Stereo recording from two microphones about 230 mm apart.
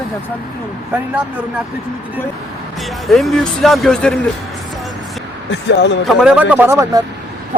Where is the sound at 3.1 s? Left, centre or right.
Centre.